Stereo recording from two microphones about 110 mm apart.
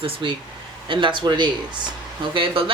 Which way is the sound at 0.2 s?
45° right (ahead or behind).